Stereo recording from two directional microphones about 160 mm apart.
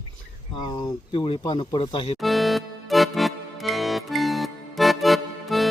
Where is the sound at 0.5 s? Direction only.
25° left (ahead or behind).